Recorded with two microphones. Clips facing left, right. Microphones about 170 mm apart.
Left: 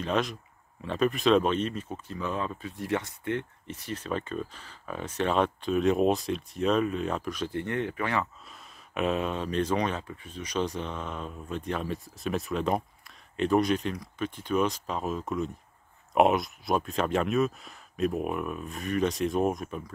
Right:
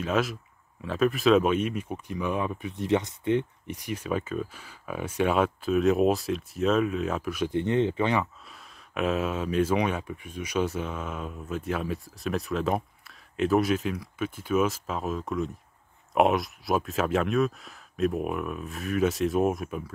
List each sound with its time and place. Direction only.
0.0 s speech: 5° right (ahead or behind)
7.5 s speech: 20° right (ahead or behind)
8.2 s speech: centre (ahead or behind)